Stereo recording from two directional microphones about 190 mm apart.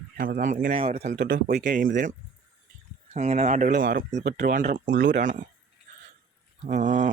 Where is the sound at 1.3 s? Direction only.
45° right (ahead or behind).